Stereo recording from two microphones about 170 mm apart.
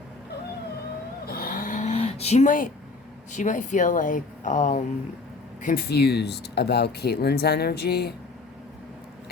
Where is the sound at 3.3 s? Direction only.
45° left (ahead or behind).